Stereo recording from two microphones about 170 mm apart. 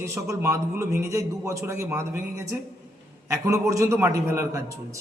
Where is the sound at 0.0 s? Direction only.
15° right (ahead or behind).